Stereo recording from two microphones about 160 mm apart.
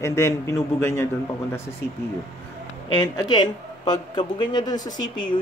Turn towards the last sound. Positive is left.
turn(degrees=25)  # may be behind; listen again after turning